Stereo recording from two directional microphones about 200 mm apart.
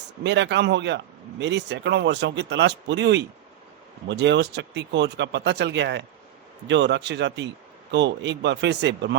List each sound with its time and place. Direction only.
0.2 s speech: 60° right (ahead or behind)